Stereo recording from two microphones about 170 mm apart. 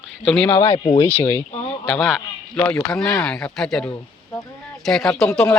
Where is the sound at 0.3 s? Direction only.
Centre (ahead or behind).